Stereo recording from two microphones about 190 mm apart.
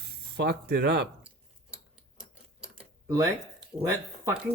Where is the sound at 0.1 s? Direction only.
60° right (ahead or behind).